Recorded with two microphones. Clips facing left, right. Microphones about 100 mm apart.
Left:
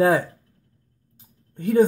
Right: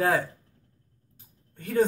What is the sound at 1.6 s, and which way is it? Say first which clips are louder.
Speech: left 6 dB; 20° left (ahead or behind).